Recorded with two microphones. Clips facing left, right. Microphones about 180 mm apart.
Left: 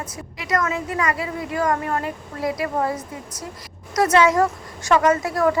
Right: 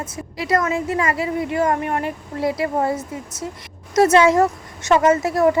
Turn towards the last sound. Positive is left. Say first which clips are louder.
# right 3 dB
turn(degrees=-25)  # may be behind; listen again after turning